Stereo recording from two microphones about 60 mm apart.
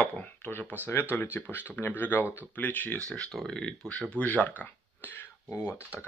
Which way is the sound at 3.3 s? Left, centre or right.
Centre.